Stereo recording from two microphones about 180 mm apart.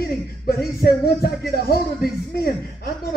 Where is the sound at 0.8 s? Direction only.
60° left (ahead or behind).